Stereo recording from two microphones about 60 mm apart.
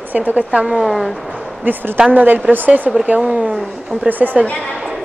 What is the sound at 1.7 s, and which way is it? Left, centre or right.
A woman's voice, right.